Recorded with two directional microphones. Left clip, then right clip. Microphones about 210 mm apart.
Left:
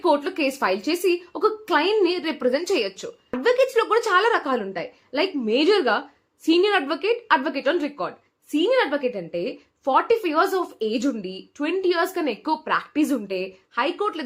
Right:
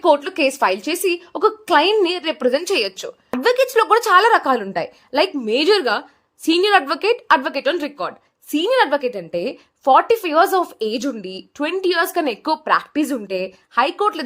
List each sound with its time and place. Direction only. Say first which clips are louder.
0.0 s a woman's voice: right 5 dB; 40° right (ahead or behind)